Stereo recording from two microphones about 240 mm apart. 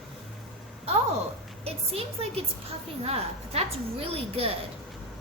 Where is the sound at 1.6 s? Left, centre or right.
Right.